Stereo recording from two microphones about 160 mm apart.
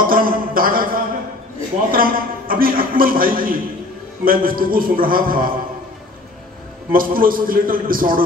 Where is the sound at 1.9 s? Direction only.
65° right (ahead or behind).